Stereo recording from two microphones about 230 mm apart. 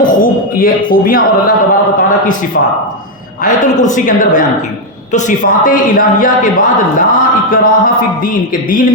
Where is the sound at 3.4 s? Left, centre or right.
Left.